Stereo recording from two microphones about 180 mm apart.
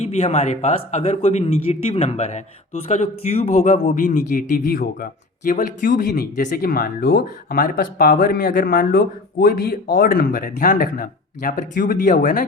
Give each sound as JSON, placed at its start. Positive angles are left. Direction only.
{"t": 0.0, "sound": "speech", "side_deg": 35}